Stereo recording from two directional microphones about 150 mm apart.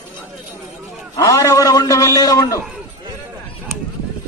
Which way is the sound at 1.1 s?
20° left (ahead or behind).